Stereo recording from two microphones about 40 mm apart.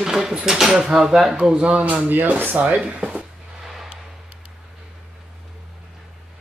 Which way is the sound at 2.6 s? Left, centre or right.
Right.